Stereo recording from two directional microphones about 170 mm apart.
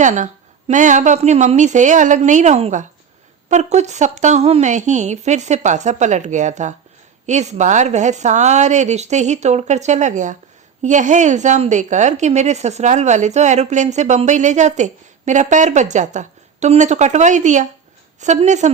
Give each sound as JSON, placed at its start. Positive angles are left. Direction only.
{"t": 0.0, "sound": "a woman's voice", "side_deg": -45}